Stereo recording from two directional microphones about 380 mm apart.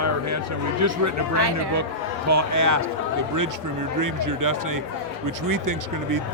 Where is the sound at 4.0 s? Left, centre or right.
Right.